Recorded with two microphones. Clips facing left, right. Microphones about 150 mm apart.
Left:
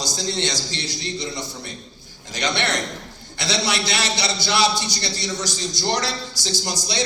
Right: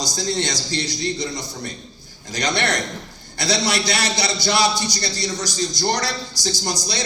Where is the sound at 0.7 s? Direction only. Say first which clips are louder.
Right 5 dB; 40° right (ahead or behind).